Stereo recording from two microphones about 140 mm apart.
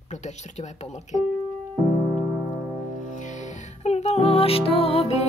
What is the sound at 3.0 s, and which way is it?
Music, 60° left (ahead or behind).